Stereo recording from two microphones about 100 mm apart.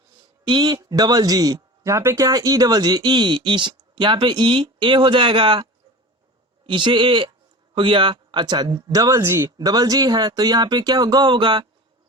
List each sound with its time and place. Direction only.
0.4 s speech: 45° right (ahead or behind)
6.7 s speech: 55° right (ahead or behind); by 9.5 s 25° right (ahead or behind)
9.6 s speech: 40° right (ahead or behind)